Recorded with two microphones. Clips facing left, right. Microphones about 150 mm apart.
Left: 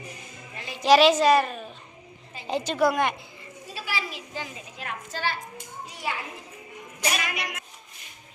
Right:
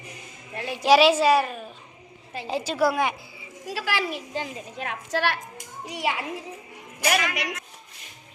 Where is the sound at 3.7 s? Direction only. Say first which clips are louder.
Right 6 dB; 90° right.